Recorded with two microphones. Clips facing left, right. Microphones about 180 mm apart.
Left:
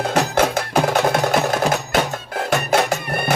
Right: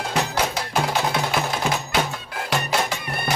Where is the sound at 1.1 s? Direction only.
45° left (ahead or behind).